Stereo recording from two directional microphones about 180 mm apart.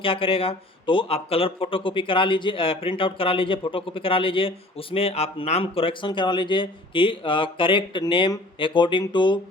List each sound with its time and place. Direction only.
0.0 s speech: 30° left (ahead or behind)